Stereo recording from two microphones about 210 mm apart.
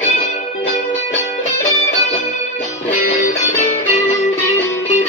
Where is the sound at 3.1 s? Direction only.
35° left (ahead or behind).